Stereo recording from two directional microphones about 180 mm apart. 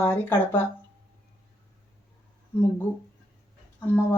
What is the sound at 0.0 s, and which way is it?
Speech, 15° left (ahead or behind).